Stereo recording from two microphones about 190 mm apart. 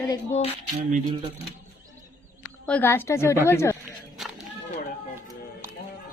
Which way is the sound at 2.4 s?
10° left (ahead or behind).